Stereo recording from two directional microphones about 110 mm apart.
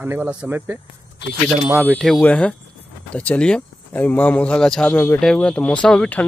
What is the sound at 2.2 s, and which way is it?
Speech, 15° left (ahead or behind).